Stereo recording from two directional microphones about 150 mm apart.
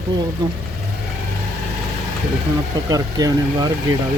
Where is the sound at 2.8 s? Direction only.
25° right (ahead or behind).